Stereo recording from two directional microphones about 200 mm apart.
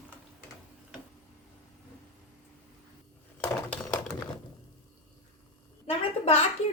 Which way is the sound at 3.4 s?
10° left (ahead or behind).